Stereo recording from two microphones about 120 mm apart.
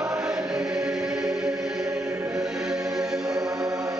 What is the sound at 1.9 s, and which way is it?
Music, 25° right (ahead or behind).